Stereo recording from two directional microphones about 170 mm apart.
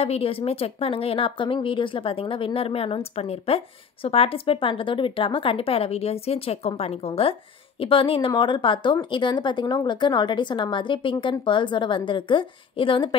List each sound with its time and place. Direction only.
0.0 s speech: 35° left (ahead or behind)